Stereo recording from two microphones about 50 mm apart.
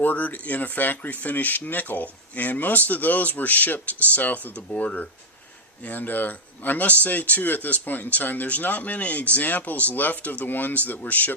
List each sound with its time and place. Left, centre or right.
0.0 s speech: left
4.5 s speech: left